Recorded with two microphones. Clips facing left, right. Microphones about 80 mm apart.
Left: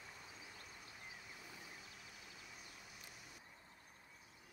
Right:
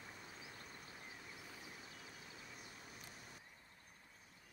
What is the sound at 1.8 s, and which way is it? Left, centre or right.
Vehicle, right.